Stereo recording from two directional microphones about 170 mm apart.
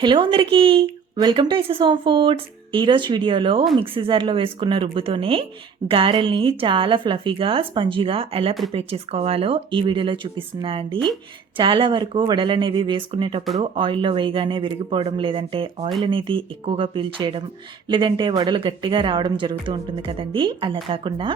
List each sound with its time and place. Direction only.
0.0 s a woman's voice: 30° right (ahead or behind)
10.9 s speech: 5° left (ahead or behind)
11.5 s a woman's voice: 30° right (ahead or behind)